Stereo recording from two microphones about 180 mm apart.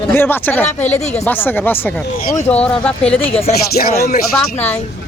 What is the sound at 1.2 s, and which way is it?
Speech, 10° left (ahead or behind).